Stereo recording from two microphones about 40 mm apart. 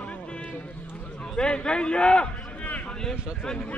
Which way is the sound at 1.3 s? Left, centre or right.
Left.